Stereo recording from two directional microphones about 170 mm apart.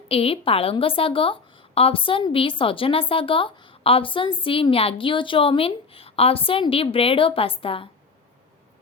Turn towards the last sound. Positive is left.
turn(degrees=30)  # may be behind; listen again after turning